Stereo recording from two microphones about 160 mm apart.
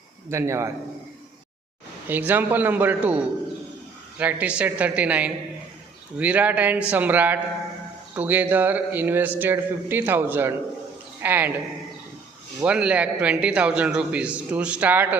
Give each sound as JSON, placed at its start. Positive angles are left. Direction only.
{"t": 0.3, "sound": "a man's voice", "side_deg": -15}
{"t": 2.0, "sound": "a man's voice", "side_deg": -10}
{"t": 12.5, "sound": "a man's voice", "side_deg": -5}